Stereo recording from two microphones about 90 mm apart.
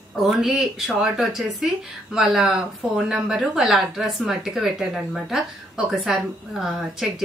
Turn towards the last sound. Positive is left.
turn(degrees=-5)  # may be behind; listen again after turning